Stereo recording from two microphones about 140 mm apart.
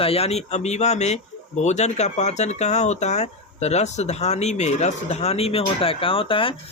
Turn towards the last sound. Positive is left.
turn(degrees=40)  # may be behind; listen again after turning